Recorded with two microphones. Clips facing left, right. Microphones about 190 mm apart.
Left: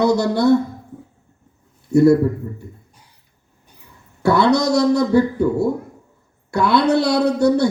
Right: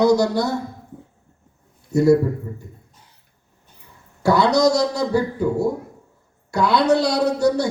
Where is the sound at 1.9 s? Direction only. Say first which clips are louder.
Left 3 dB; 60° left (ahead or behind).